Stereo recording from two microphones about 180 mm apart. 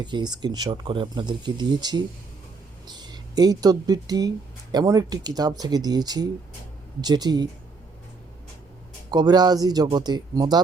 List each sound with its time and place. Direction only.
0.0 s speech: 25° right (ahead or behind)
9.0 s speech: 25° right (ahead or behind)